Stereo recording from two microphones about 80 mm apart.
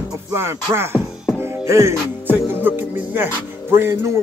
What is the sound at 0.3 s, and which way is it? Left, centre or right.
Music, right.